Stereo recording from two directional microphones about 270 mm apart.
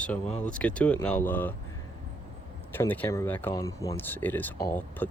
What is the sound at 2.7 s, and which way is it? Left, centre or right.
Speech, centre.